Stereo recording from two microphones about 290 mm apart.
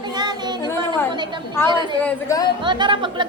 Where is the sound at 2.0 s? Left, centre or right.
Centre.